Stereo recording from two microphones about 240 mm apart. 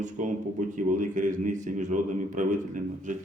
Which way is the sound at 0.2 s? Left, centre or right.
Right.